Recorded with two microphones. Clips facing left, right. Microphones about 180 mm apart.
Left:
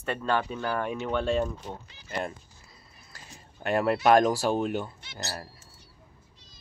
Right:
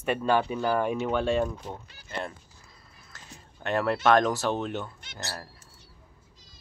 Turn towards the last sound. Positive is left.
turn(degrees=25)  # may be behind; listen again after turning